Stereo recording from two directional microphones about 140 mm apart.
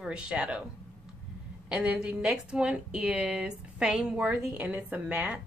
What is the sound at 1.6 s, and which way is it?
A woman's voice, 5° right (ahead or behind).